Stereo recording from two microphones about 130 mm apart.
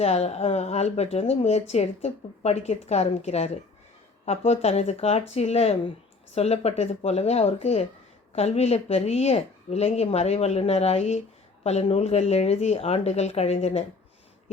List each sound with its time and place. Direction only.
0.0 s a woman's voice: 55° left (ahead or behind)